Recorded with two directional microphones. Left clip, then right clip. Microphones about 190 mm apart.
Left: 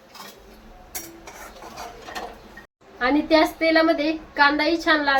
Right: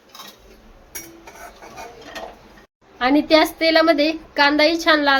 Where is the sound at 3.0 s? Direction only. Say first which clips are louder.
Right 3 dB; 45° right (ahead or behind).